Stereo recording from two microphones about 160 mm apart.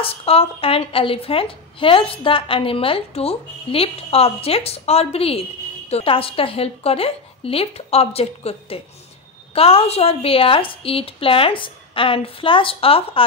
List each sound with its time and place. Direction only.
0.0 s a woman's voice: 35° left (ahead or behind)